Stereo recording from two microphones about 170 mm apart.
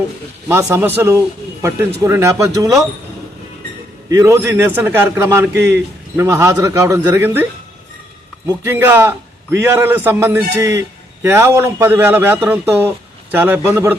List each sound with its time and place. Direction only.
0.4 s a man's voice: 10° right (ahead or behind)
4.1 s a man's voice: 20° right (ahead or behind)
8.4 s a man's voice: 15° right (ahead or behind)